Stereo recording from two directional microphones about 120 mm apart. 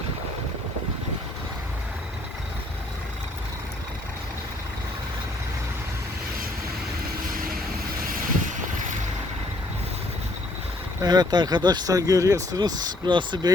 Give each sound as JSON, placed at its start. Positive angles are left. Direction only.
{"t": 11.0, "sound": "speech", "side_deg": -35}